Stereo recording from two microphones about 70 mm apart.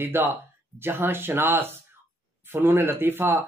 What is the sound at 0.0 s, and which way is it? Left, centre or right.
Speech, right.